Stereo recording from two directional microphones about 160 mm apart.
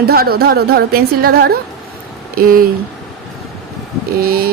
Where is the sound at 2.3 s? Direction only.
65° right (ahead or behind).